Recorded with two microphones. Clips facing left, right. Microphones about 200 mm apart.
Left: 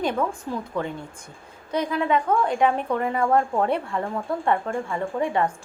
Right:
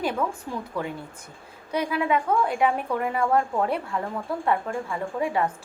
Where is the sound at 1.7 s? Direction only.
10° right (ahead or behind).